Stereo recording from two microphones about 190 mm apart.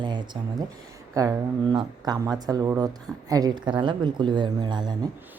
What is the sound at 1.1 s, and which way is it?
Speech, 15° right (ahead or behind).